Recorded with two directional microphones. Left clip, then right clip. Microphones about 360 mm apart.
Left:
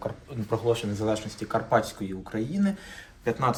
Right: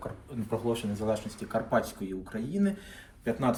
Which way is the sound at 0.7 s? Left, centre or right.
Left.